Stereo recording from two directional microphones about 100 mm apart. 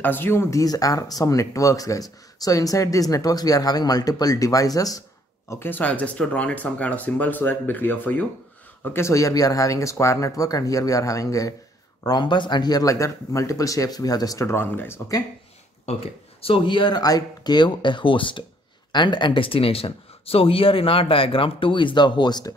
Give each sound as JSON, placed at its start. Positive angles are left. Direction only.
{"t": 0.0, "sound": "speech", "side_deg": 20}
{"t": 5.5, "sound": "speech", "side_deg": 20}
{"t": 12.0, "sound": "speech", "side_deg": 45}
{"t": 15.8, "sound": "speech", "side_deg": 80}
{"t": 17.0, "sound": "speech", "side_deg": 40}